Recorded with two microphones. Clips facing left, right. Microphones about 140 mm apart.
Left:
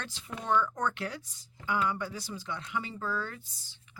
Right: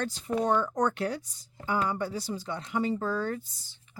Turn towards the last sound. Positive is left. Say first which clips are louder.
# right 6 dB
turn(degrees=-40)  # may be behind; listen again after turning